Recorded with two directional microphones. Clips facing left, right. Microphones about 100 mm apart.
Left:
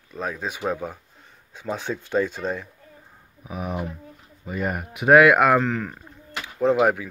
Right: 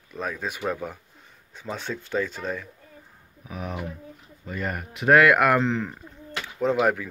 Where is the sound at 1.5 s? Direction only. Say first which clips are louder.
Left 4 dB; 15° left (ahead or behind).